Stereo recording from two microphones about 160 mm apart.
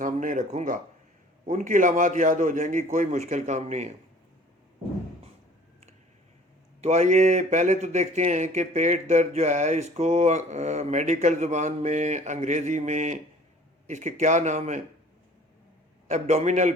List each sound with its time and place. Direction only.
0.0 s speech: 55° right (ahead or behind)
6.8 s speech: 45° right (ahead or behind)
16.0 s speech: 45° right (ahead or behind)